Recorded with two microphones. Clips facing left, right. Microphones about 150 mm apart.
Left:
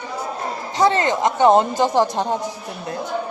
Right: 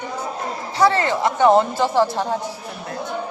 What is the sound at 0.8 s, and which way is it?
Speech, 20° left (ahead or behind).